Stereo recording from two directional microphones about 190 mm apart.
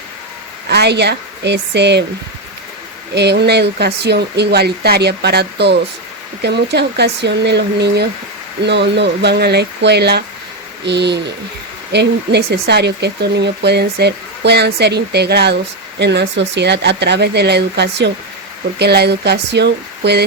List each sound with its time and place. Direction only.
0.7 s speech: 60° right (ahead or behind)
3.2 s speech: 60° right (ahead or behind)